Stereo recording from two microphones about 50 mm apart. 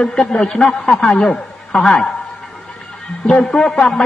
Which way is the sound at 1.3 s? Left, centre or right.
Centre.